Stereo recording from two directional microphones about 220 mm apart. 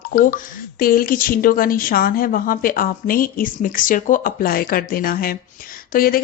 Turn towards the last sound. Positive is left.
turn(degrees=40)  # may be behind; listen again after turning